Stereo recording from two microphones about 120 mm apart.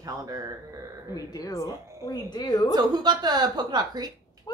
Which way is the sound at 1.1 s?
30° left (ahead or behind).